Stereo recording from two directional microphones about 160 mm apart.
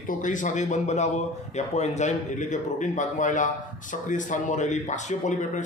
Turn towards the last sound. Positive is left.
turn(degrees=50)  # may be behind; listen again after turning